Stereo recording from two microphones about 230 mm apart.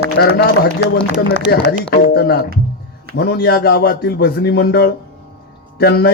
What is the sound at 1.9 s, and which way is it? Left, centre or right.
A man's voice, left.